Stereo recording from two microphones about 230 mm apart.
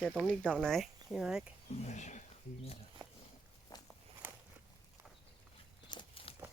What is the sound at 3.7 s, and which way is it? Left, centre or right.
Walk, centre.